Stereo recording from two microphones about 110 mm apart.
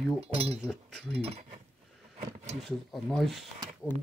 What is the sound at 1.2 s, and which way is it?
Speech, 70° right (ahead or behind).